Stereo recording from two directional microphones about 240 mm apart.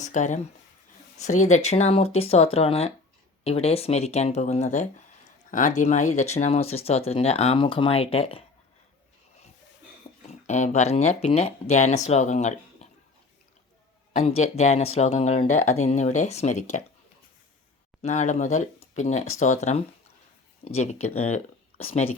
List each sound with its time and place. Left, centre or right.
0.0 s speech: left
10.4 s speech: left
14.2 s speech: left
18.0 s speech: left